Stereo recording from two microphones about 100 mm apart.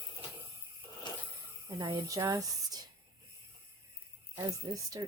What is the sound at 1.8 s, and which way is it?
Speech, 40° right (ahead or behind).